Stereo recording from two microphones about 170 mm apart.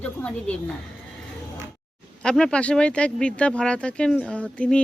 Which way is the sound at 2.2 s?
5° left (ahead or behind).